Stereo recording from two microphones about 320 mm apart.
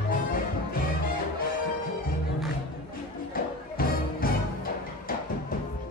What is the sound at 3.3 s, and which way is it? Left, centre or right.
Music, left.